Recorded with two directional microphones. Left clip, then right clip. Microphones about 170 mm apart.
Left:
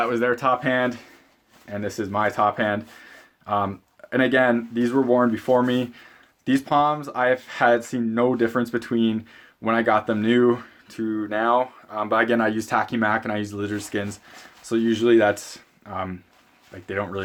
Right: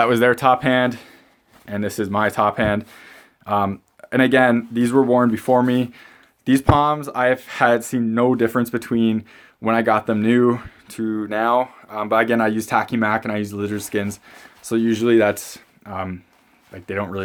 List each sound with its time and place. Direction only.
0.0 s speech: 55° right (ahead or behind); by 17.2 s 30° right (ahead or behind)